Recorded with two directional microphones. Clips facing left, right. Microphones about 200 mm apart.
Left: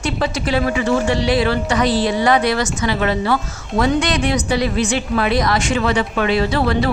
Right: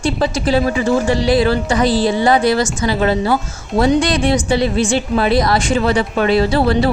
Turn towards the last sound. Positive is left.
turn(degrees=-30)  # may be behind; listen again after turning